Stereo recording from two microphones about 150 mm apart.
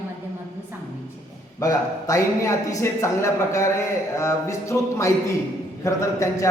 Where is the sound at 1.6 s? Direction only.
20° left (ahead or behind).